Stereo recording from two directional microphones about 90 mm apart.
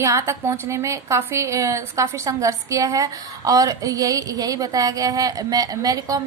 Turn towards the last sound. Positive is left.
turn(degrees=-40)  # may be behind; listen again after turning